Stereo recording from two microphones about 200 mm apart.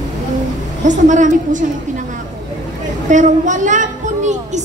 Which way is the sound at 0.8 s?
40° right (ahead or behind).